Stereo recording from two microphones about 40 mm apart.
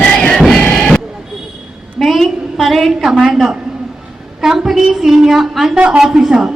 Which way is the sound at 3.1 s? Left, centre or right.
Centre.